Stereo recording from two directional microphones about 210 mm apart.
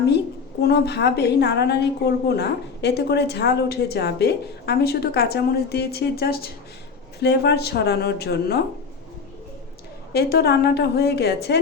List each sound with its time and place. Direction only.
0.6 s a woman's voice: 55° left (ahead or behind)
10.1 s a woman's voice: 50° left (ahead or behind)